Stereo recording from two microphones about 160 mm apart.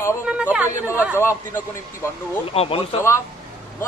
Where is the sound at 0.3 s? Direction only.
10° right (ahead or behind).